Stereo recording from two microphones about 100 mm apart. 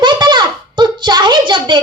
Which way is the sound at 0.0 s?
50° right (ahead or behind).